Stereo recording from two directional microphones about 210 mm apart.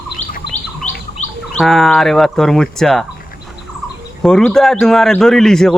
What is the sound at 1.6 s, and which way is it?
A man's voice, centre (ahead or behind).